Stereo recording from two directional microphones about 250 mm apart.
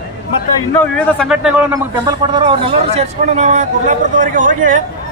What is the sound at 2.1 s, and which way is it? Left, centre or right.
A man's voice, centre.